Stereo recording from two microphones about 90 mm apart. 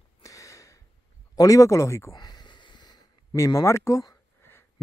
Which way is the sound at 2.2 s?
50° left (ahead or behind).